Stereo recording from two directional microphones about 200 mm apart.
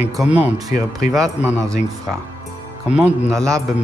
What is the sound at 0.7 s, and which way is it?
Speech, 45° left (ahead or behind).